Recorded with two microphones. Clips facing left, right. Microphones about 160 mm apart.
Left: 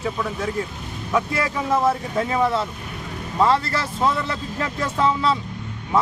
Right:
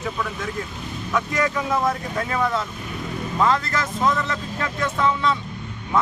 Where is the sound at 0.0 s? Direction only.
30° left (ahead or behind).